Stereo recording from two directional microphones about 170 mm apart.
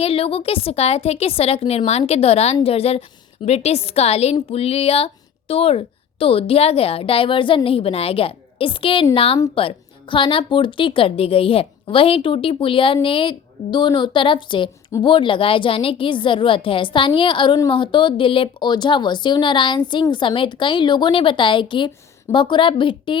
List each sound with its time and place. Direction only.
0.0 s a woman's voice: 35° left (ahead or behind)